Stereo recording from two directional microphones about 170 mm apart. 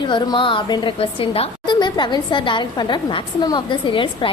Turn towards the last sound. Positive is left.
turn(degrees=30)  # may be behind; listen again after turning